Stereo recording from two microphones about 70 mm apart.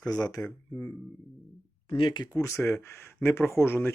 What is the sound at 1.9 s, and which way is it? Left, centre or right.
Speech, left.